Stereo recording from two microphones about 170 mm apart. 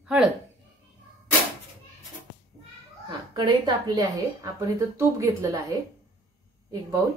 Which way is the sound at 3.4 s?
25° right (ahead or behind).